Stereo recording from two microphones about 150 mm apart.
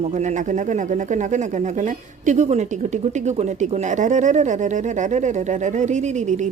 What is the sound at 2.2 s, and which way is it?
Speech, 50° right (ahead or behind).